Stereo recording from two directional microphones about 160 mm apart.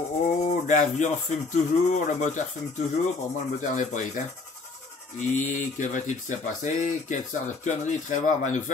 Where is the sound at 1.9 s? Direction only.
50° left (ahead or behind).